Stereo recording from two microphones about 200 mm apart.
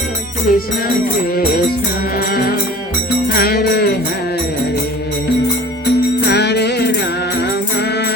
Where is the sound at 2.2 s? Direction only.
50° left (ahead or behind).